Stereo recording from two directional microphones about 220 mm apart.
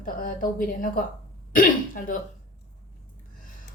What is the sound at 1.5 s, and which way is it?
Speech, 40° left (ahead or behind).